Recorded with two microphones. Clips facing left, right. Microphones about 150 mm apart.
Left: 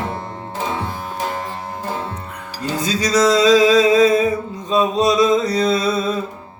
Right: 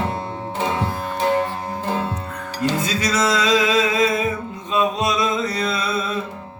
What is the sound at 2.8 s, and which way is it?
Music, 35° left (ahead or behind).